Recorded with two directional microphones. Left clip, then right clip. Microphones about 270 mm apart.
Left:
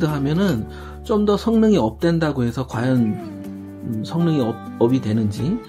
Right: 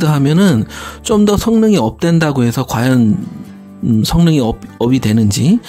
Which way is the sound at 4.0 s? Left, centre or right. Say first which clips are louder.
Right 6 dB; right.